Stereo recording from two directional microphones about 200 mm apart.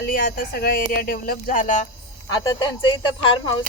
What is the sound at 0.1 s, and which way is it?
Speech, 45° left (ahead or behind).